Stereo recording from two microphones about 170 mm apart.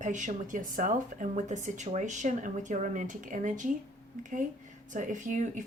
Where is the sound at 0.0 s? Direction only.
45° right (ahead or behind).